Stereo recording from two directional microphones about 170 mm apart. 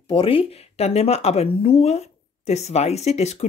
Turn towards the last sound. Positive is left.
turn(degrees=40)  # may be behind; listen again after turning